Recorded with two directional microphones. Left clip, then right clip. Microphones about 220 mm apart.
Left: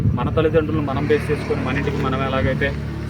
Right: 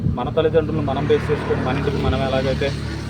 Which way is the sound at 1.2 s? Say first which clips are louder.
Right 1 dB; 15° left (ahead or behind).